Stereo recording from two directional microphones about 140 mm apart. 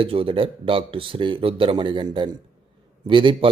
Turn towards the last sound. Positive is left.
turn(degrees=-35)  # may be behind; listen again after turning